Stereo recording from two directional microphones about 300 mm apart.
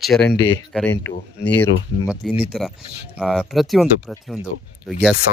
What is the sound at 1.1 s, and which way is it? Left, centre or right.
Speech, left.